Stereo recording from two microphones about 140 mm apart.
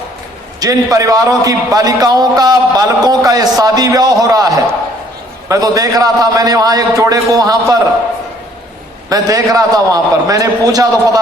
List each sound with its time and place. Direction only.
0.6 s a man's voice: 25° right (ahead or behind)
9.0 s a man's voice: 25° right (ahead or behind)